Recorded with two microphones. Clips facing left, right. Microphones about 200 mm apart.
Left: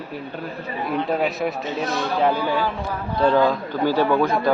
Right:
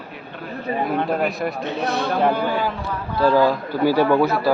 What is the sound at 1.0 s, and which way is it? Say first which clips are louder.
Speech: even; centre (ahead or behind).